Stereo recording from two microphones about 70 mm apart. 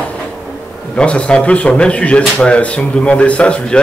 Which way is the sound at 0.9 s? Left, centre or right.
Centre.